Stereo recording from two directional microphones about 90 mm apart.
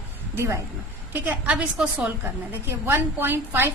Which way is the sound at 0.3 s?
35° right (ahead or behind).